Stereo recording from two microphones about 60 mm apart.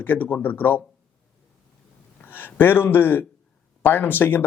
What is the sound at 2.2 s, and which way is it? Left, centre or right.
A man's voice, left.